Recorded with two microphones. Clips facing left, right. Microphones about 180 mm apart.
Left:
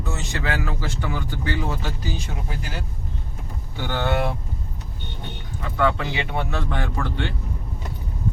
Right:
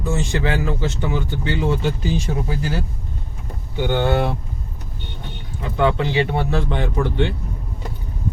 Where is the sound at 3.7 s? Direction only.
20° right (ahead or behind).